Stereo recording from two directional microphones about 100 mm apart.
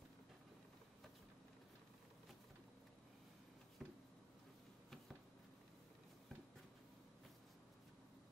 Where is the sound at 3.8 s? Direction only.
Centre (ahead or behind).